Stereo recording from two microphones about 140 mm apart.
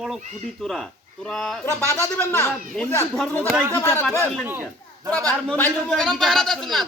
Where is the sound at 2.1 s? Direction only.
20° left (ahead or behind).